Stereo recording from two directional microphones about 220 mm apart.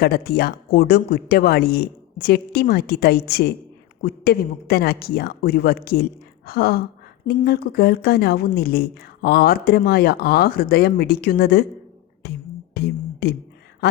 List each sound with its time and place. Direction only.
0.0 s speech: 45° left (ahead or behind)
12.2 s beatboxing: 50° left (ahead or behind)